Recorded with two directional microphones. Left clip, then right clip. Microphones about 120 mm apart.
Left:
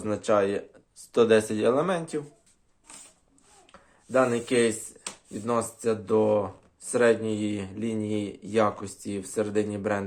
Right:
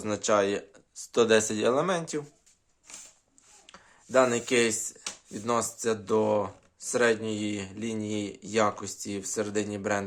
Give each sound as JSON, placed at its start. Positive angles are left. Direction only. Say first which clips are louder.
{"t": 0.0, "sound": "speech", "louder": "left 1 dB", "side_deg": -30}
{"t": 3.7, "sound": "speech", "louder": "left 1 dB", "side_deg": -35}
{"t": 6.9, "sound": "speech", "louder": "left 3 dB", "side_deg": -20}